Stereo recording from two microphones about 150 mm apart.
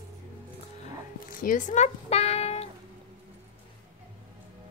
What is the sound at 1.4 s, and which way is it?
Speech, 55° left (ahead or behind).